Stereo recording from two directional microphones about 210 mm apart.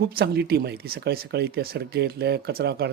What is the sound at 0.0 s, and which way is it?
Speech, 45° right (ahead or behind).